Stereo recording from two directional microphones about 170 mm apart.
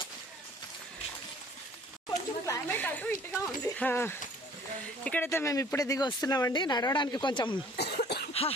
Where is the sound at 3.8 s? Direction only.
10° left (ahead or behind).